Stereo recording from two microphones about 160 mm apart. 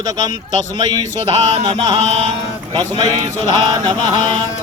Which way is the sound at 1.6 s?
30° right (ahead or behind).